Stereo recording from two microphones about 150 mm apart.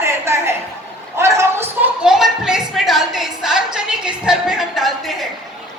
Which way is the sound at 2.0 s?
5° right (ahead or behind).